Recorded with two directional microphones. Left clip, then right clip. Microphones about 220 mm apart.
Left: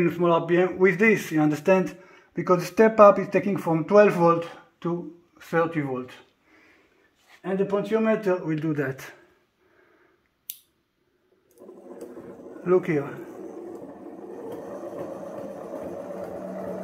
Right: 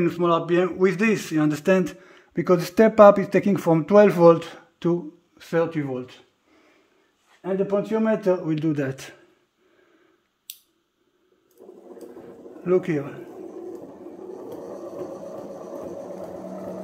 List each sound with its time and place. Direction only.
0.0 s a man's voice: 20° right (ahead or behind); by 6.1 s 40° right (ahead or behind)
7.4 s speech: 55° right (ahead or behind)
7.9 s a man's voice: 35° right (ahead or behind)
12.6 s speech: 25° right (ahead or behind)